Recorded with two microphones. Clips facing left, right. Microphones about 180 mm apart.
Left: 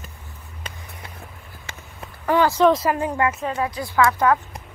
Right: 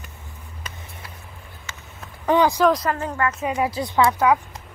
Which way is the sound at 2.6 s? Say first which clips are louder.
Left 2 dB; 5° left (ahead or behind).